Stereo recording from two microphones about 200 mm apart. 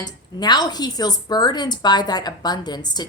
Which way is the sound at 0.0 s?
20° left (ahead or behind).